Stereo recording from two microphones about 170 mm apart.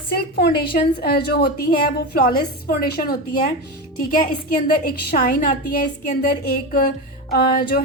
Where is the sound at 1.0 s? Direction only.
65° left (ahead or behind).